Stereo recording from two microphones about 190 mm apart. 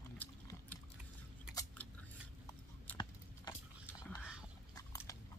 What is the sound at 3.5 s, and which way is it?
Horse, 10° left (ahead or behind).